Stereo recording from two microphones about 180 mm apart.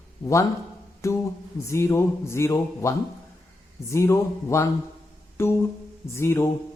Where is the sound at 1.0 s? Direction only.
15° left (ahead or behind).